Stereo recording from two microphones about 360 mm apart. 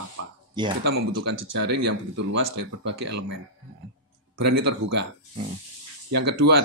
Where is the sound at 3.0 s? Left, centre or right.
Right.